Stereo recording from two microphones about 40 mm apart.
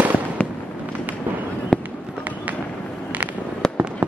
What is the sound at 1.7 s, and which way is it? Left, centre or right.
Fireworks, centre.